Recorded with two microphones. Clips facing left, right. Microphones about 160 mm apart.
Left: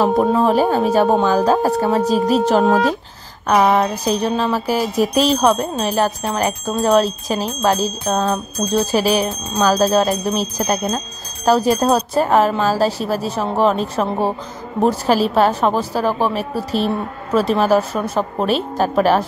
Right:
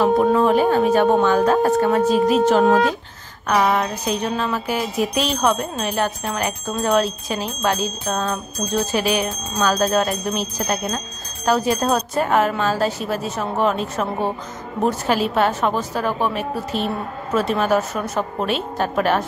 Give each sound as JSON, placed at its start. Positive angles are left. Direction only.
{"t": 0.0, "sound": "wind chime", "side_deg": 35}